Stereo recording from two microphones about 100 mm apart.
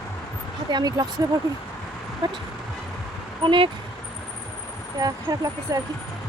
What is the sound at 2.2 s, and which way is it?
Speech, 50° right (ahead or behind).